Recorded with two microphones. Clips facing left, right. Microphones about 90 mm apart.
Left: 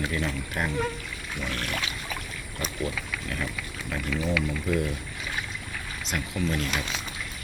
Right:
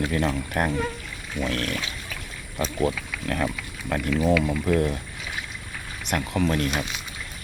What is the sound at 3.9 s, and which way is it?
Speech, 55° right (ahead or behind).